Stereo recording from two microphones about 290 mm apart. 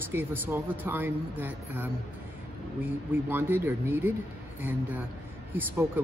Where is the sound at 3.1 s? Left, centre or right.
Centre.